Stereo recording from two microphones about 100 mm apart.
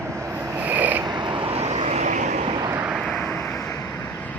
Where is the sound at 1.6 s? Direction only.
90° right.